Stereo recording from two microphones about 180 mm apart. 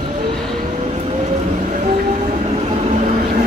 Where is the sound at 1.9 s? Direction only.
35° right (ahead or behind).